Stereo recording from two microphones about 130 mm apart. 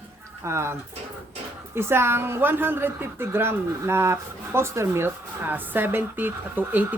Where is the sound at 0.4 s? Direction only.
20° right (ahead or behind).